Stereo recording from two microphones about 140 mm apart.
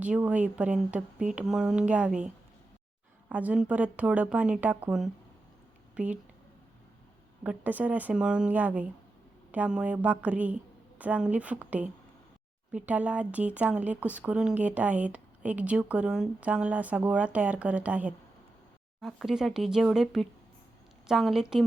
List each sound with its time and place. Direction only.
0.0 s a woman's voice: 10° right (ahead or behind)
7.4 s a woman's voice: 10° right (ahead or behind)